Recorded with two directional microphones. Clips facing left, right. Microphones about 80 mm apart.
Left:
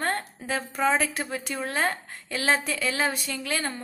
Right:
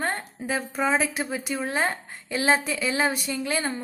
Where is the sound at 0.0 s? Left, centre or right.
Centre.